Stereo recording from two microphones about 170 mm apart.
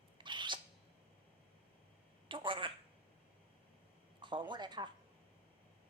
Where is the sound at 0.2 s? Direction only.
30° right (ahead or behind).